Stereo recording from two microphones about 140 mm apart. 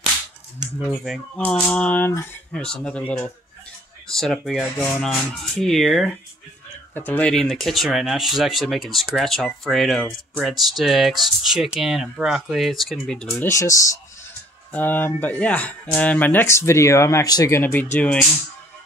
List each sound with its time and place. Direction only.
0.8 s speech: centre (ahead or behind)
6.9 s speech: 15° left (ahead or behind)
13.5 s speech: 20° left (ahead or behind)